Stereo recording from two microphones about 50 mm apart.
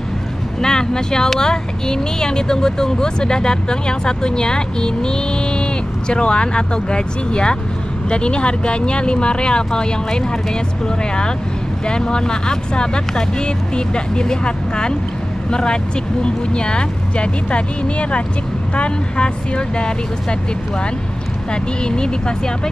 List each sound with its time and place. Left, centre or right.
0.6 s speech: centre
11.9 s speech: centre
21.8 s speech: centre